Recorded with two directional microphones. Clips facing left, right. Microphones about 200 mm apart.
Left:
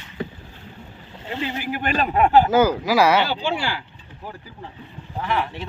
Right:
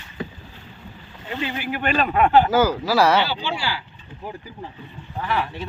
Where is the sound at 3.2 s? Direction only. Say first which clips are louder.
Left 2 dB; 50° left (ahead or behind).